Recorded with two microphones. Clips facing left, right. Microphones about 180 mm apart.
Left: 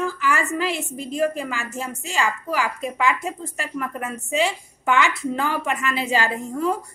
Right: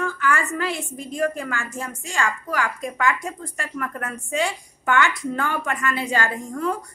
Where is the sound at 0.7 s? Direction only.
25° left (ahead or behind).